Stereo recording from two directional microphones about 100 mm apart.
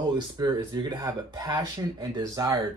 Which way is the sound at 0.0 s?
40° right (ahead or behind).